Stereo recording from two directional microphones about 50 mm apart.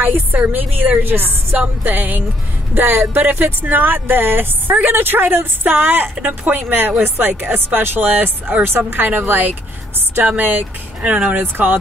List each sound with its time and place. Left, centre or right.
0.0 s speech: right